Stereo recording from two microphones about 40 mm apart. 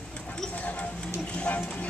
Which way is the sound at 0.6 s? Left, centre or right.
Left.